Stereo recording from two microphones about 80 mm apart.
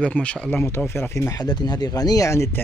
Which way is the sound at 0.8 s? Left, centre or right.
Left.